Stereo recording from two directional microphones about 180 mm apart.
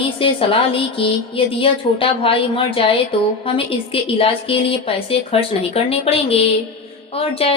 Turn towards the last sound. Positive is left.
turn(degrees=30)  # may be behind; listen again after turning